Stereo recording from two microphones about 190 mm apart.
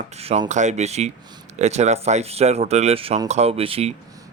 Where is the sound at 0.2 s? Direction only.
35° right (ahead or behind).